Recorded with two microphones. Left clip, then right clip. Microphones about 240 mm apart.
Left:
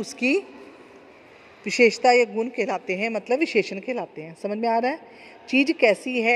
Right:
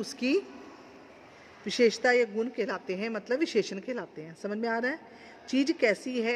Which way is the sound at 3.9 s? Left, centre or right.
Centre.